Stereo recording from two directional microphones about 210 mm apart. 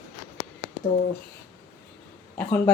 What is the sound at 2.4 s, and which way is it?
Speech, 5° left (ahead or behind).